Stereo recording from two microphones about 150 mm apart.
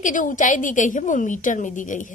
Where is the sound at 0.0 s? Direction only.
60° left (ahead or behind).